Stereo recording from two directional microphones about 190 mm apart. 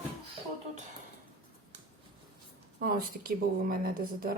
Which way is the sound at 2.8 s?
50° right (ahead or behind).